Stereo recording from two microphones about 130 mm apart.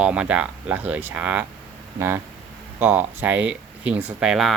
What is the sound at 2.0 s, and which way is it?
Speech, 20° right (ahead or behind).